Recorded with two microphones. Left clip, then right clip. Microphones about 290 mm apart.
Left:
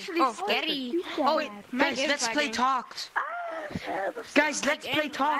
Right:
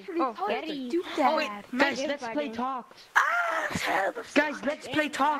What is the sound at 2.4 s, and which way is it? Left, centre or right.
Speech, left.